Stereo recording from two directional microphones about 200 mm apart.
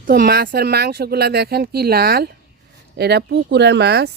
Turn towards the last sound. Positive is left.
turn(degrees=-55)  # may be behind; listen again after turning